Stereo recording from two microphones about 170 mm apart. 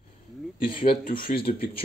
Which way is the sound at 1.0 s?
55° left (ahead or behind).